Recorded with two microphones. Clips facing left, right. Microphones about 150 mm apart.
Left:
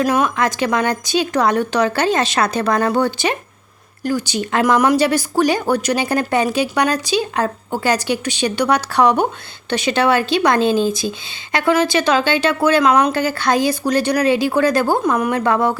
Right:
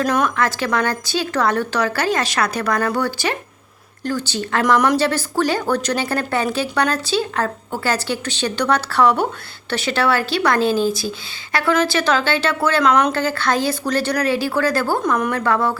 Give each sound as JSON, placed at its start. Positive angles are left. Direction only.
{"t": 0.0, "sound": "speech", "side_deg": 10}